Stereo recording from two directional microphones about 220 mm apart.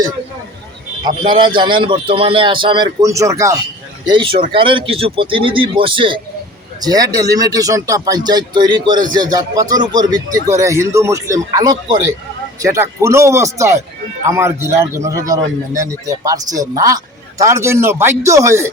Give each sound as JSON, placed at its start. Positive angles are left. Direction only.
{"t": 1.2, "sound": "a man's voice", "side_deg": -20}